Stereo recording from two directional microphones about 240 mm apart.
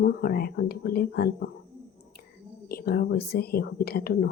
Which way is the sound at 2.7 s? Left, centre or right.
Left.